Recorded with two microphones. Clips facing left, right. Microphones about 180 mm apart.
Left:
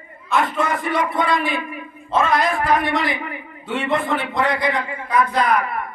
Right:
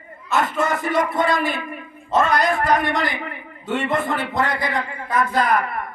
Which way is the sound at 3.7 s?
45° right (ahead or behind).